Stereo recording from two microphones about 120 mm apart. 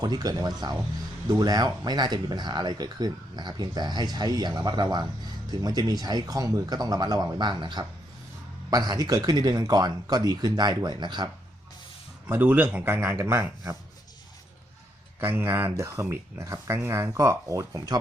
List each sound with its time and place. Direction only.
0.0 s speech: 35° right (ahead or behind)
12.3 s a man's voice: 15° right (ahead or behind)
15.2 s speech: 15° right (ahead or behind)